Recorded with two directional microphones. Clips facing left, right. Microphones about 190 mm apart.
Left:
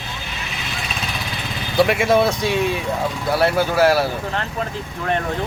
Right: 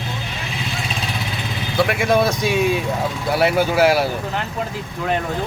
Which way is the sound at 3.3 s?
15° right (ahead or behind).